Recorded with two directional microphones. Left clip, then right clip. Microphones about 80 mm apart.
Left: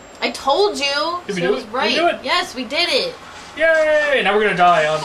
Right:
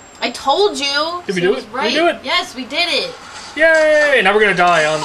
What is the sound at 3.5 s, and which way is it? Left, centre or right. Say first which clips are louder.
Speech: right 4 dB; right.